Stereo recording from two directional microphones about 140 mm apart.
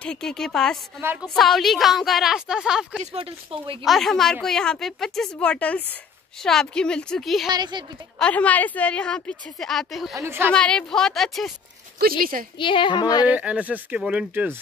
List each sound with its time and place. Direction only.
0.0 s speech: 5° left (ahead or behind)
3.0 s speech: 45° right (ahead or behind)
3.8 s speech: centre (ahead or behind)
7.4 s speech: 30° right (ahead or behind)
8.2 s a woman's voice: 10° left (ahead or behind)
10.1 s speech: 15° right (ahead or behind)
10.5 s speech: 5° left (ahead or behind)
12.0 s speech: 90° right
12.5 s a woman's voice: 35° left (ahead or behind)
13.3 s speech: 10° right (ahead or behind)